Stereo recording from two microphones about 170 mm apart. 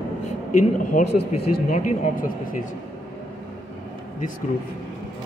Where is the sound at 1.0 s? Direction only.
45° left (ahead or behind).